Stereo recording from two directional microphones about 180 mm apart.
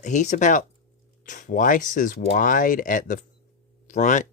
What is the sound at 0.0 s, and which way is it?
Speech, 40° left (ahead or behind).